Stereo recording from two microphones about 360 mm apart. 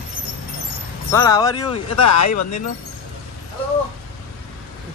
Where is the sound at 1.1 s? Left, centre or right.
Centre.